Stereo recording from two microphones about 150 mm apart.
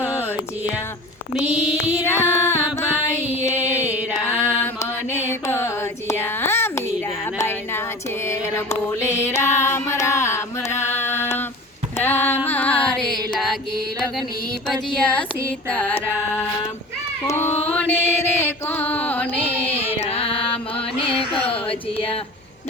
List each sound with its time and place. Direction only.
1.4 s child singing: 5° right (ahead or behind)
2.0 s music: 15° left (ahead or behind)
3.5 s music: 10° right (ahead or behind)
4.2 s mantra: 10° left (ahead or behind)
7.3 s a sound: 15° left (ahead or behind)
8.2 s mantra: 15° left (ahead or behind)
11.9 s a sound: 15° left (ahead or behind)
12.5 s music: 10° left (ahead or behind)
14.9 s child singing: 5° left (ahead or behind)
15.7 s music: 10° left (ahead or behind)
17.2 s female singing: 15° left (ahead or behind)
17.7 s mantra: 10° left (ahead or behind)
19.3 s carnatic music: 40° left (ahead or behind)
21.4 s a sound: 40° left (ahead or behind)